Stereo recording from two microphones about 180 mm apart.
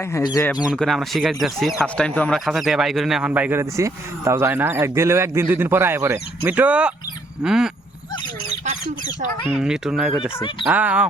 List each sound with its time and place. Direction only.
0.0 s speech: 20° left (ahead or behind)
0.7 s a man's voice: centre (ahead or behind)
8.4 s a sound: 40° right (ahead or behind)
9.5 s a man's voice: 5° right (ahead or behind)